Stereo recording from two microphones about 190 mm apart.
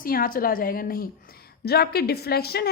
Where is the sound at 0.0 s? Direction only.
50° left (ahead or behind).